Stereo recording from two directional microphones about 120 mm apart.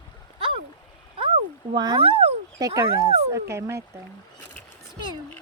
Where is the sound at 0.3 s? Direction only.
50° right (ahead or behind).